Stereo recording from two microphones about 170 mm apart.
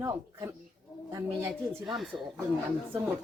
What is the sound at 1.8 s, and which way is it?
Speech, centre (ahead or behind).